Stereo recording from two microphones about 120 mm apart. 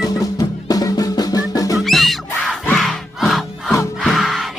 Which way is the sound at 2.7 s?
Centre (ahead or behind).